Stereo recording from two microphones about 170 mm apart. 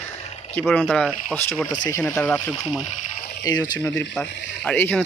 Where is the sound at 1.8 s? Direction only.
20° left (ahead or behind).